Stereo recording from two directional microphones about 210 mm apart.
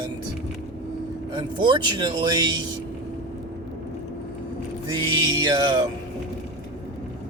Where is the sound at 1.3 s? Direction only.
20° right (ahead or behind).